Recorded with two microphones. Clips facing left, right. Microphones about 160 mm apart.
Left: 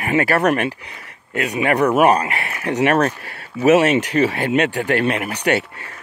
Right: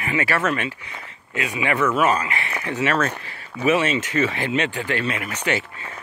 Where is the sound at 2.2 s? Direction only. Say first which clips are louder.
Left 4 dB; 60° left (ahead or behind).